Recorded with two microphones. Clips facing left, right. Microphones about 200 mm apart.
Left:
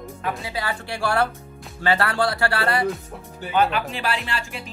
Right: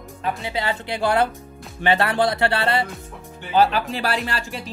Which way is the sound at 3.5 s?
35° right (ahead or behind).